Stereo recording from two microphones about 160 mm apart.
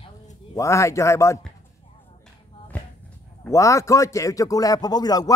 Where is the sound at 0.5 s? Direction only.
20° left (ahead or behind).